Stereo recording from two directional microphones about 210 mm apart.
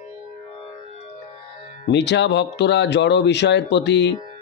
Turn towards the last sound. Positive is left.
turn(degrees=55)  # may be behind; listen again after turning